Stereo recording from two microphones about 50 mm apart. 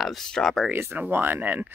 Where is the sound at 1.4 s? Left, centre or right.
Right.